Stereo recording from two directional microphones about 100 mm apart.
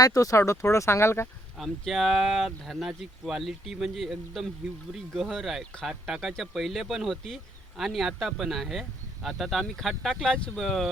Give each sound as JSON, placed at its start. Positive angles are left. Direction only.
{"t": 0.0, "sound": "speech", "side_deg": 35}
{"t": 1.5, "sound": "speech", "side_deg": 0}